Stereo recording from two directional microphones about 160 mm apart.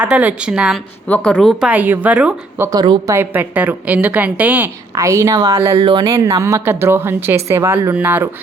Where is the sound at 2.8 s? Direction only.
30° right (ahead or behind).